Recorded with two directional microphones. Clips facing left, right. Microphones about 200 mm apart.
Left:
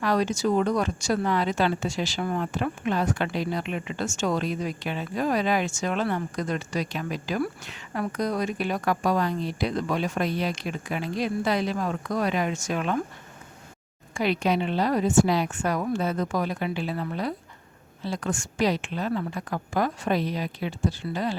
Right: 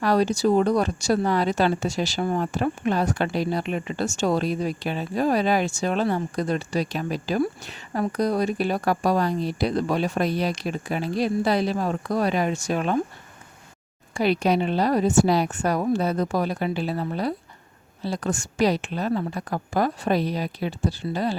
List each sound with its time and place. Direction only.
0.0 s speech: 35° right (ahead or behind)
14.1 s speech: 35° right (ahead or behind)